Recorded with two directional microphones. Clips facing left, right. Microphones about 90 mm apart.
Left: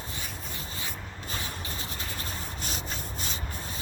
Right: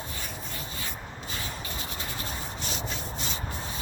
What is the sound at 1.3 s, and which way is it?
Rub, 35° left (ahead or behind).